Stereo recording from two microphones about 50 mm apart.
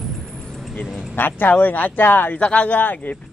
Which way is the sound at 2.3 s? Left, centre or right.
Left.